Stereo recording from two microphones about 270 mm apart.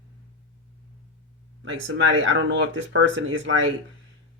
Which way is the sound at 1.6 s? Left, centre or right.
Right.